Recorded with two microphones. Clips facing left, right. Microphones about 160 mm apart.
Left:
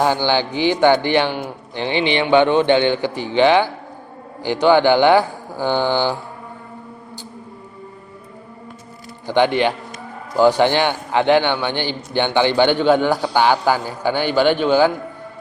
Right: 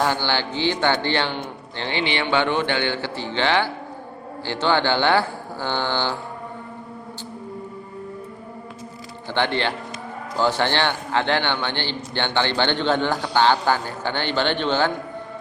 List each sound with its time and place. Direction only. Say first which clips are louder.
0.0 s a man's voice: left 5 dB; 15° left (ahead or behind)
9.2 s a man's voice: left 7 dB; 15° left (ahead or behind)